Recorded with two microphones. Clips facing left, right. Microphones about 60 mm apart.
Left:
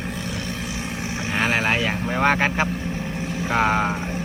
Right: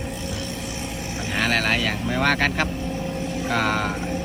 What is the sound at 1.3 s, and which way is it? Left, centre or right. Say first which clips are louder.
Speech: left 1 dB; centre.